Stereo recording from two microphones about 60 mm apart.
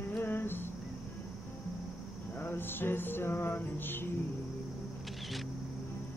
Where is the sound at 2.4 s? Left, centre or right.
Left.